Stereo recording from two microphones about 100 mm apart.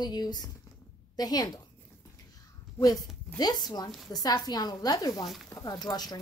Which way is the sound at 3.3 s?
45° left (ahead or behind).